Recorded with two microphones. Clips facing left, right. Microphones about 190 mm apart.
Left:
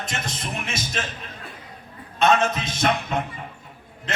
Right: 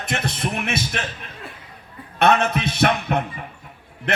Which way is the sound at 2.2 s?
60° right (ahead or behind).